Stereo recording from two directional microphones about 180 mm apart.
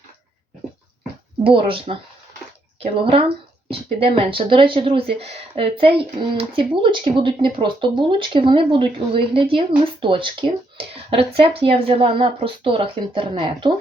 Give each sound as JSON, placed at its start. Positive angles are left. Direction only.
{"t": 1.5, "sound": "a woman's voice", "side_deg": -30}